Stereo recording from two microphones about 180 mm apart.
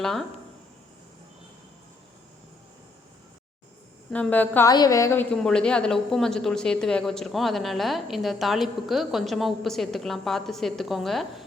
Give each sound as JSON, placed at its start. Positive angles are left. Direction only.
{"t": 0.0, "sound": "a woman's voice", "side_deg": 0}
{"t": 4.1, "sound": "a woman's voice", "side_deg": 10}
{"t": 4.7, "sound": "a woman's voice", "side_deg": 20}
{"t": 5.3, "sound": "a woman's voice", "side_deg": 5}